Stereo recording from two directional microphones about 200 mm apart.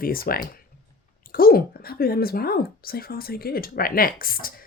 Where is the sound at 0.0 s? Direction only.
45° left (ahead or behind).